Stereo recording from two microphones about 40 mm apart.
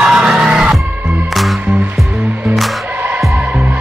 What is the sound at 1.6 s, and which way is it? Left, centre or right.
Music, right.